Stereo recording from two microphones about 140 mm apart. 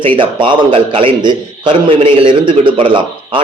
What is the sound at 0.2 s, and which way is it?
Speech, 35° right (ahead or behind).